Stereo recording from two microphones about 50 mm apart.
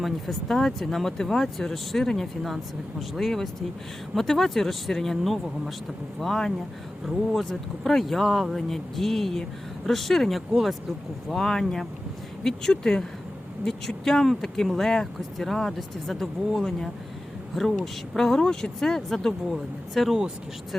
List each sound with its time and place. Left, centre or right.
0.0 s speech: centre
7.9 s speech: centre